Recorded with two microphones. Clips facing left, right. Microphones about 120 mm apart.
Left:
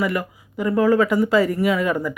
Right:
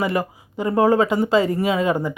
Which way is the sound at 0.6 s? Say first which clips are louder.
Even; 30° right (ahead or behind).